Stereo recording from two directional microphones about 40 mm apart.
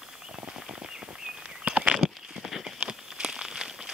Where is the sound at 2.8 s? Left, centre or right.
Centre.